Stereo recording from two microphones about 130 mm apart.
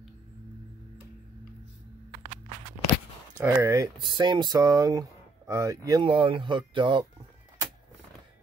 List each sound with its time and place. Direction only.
3.3 s speech: 20° right (ahead or behind)
4.0 s speech: 35° right (ahead or behind)
6.0 s speech: 40° right (ahead or behind)